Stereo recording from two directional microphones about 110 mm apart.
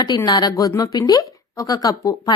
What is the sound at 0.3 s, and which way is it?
Speech, 35° left (ahead or behind).